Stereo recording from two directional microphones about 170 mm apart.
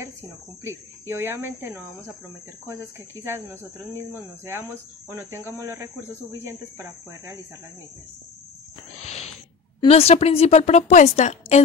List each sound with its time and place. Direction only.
0.7 s speech: 15° right (ahead or behind)
9.0 s a sound: 40° left (ahead or behind)
9.8 s a woman's voice: 35° left (ahead or behind)